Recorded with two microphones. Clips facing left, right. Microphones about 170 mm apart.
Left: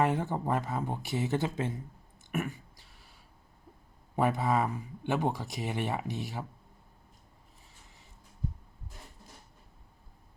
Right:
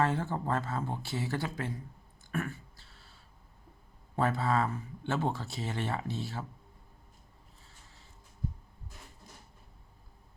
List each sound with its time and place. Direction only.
0.0 s speech: 15° left (ahead or behind)
2.3 s a sound: 15° left (ahead or behind)
4.1 s speech: 15° left (ahead or behind)